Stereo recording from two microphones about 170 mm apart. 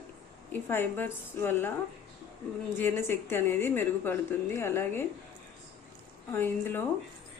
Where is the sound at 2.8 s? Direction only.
10° left (ahead or behind).